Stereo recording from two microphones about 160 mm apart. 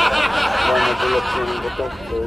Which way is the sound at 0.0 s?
Centre (ahead or behind).